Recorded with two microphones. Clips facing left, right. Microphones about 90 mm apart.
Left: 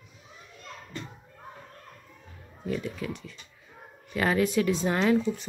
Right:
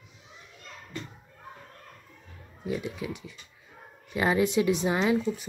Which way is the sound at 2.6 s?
15° right (ahead or behind).